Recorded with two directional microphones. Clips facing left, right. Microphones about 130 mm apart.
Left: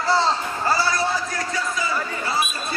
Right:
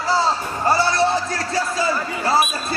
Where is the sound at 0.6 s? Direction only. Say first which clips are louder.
Right 5 dB; 25° right (ahead or behind).